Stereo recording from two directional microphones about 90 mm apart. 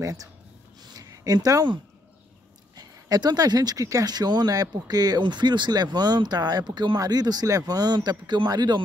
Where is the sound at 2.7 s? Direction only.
50° right (ahead or behind).